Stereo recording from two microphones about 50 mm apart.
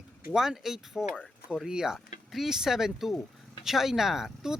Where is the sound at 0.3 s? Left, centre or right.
Centre.